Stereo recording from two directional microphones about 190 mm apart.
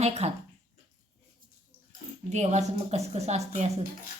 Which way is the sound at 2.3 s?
35° right (ahead or behind).